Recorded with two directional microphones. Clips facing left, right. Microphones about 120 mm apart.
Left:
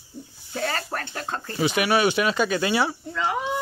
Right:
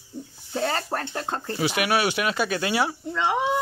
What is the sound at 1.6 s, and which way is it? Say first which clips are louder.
Speech: left 3 dB; 5° right (ahead or behind).